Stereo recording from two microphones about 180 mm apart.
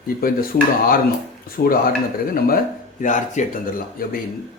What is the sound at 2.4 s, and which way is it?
Speech, 50° left (ahead or behind).